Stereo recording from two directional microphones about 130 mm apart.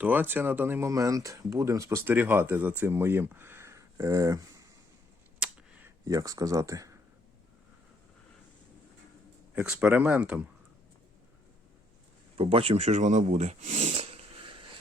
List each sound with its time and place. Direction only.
0.0 s speech: 15° right (ahead or behind)
5.4 s a sound: 10° right (ahead or behind)
6.1 s speech: 25° right (ahead or behind)
9.6 s speech: 10° right (ahead or behind)
12.4 s speech: 45° right (ahead or behind); by 13.9 s 65° right (ahead or behind)
13.9 s a sound: 50° right (ahead or behind)